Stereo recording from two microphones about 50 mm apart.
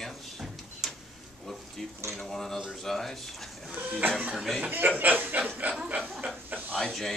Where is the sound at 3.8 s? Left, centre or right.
Right.